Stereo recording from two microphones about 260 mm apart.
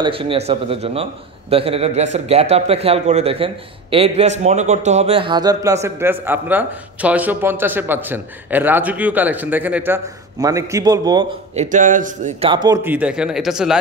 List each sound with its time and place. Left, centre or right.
0.0 s a man's voice: centre
11.7 s a man's voice: right; by 13.7 s centre